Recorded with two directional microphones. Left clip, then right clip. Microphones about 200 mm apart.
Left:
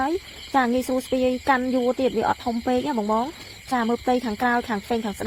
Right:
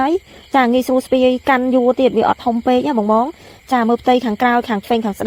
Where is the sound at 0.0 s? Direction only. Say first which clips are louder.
Right 8 dB; 35° right (ahead or behind).